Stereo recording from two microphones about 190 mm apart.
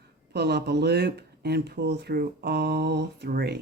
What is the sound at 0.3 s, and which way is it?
Speech, 60° right (ahead or behind).